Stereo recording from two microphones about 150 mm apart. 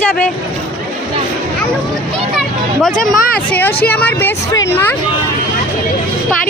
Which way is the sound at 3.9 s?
10° left (ahead or behind).